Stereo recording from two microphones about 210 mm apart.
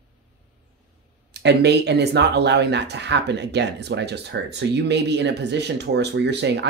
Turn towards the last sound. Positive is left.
turn(degrees=-55)  # may be behind; listen again after turning